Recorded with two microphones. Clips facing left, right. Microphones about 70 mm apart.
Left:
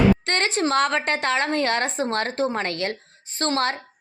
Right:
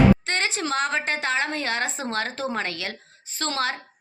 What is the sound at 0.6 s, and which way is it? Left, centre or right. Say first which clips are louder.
A woman's voice: left 7 dB; left.